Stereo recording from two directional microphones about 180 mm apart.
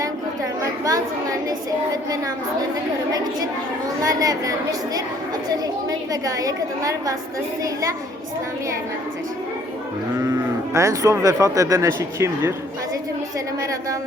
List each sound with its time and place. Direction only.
0.6 s a sound: 20° right (ahead or behind)
4.0 s a woman's voice: 20° right (ahead or behind)
6.1 s a woman's voice: 20° right (ahead or behind)
10.2 s speech: 15° right (ahead or behind)